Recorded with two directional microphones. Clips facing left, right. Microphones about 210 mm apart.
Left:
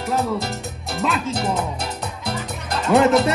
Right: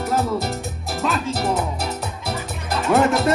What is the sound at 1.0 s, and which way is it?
Music, centre (ahead or behind).